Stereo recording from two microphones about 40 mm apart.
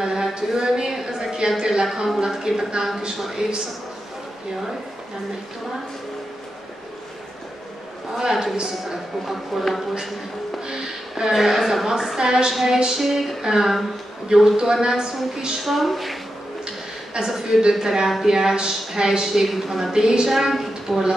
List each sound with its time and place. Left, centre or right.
0.0 s a sound: centre
1.6 s a woman's voice: centre
8.2 s a woman's voice: centre
10.7 s a woman's voice: centre
12.2 s a woman's voice: centre
15.6 s a woman's voice: centre
17.3 s a woman's voice: centre
19.2 s a woman's voice: centre
19.9 s a woman's voice: centre
20.2 s a woman's voice: centre